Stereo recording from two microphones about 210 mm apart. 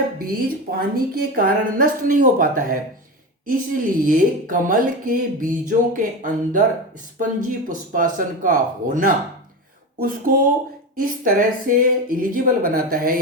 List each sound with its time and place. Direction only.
0.2 s a woman's voice: 45° right (ahead or behind)
11.2 s speech: 40° right (ahead or behind)